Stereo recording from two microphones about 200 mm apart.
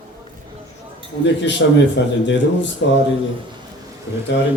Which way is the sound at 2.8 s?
65° left (ahead or behind).